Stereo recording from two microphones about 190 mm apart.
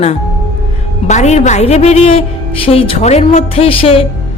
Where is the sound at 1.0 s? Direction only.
35° left (ahead or behind).